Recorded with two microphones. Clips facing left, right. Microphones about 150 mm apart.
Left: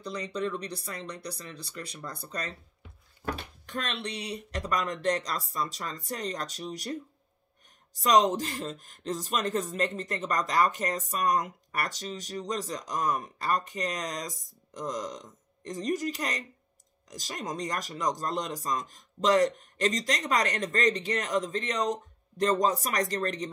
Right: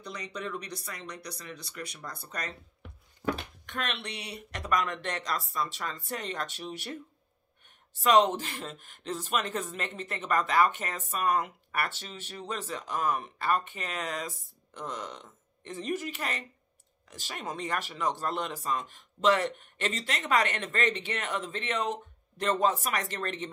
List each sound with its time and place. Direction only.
0.0 s speech: 30° left (ahead or behind)
3.6 s speech: 35° left (ahead or behind)
7.9 s speech: 40° left (ahead or behind)